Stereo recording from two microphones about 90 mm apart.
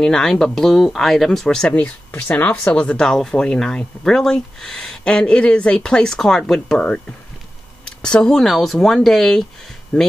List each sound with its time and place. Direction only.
0.0 s speech: 5° left (ahead or behind)
9.9 s speech: 20° left (ahead or behind)